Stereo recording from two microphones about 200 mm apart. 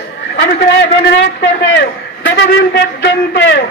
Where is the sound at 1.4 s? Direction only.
65° left (ahead or behind).